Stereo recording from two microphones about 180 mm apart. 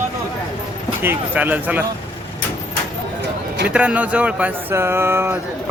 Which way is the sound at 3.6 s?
5° right (ahead or behind).